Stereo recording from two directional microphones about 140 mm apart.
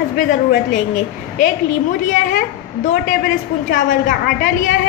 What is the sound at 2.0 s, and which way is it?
A woman's voice, 70° left (ahead or behind).